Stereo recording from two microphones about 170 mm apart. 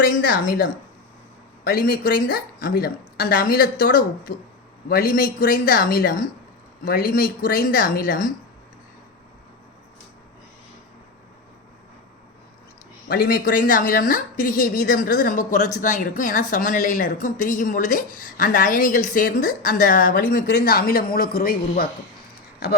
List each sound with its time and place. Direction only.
0.4 s a woman's voice: 60° left (ahead or behind)
13.1 s a woman's voice: 65° left (ahead or behind)